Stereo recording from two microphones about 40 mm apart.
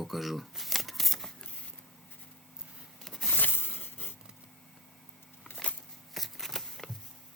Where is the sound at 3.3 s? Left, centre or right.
Left.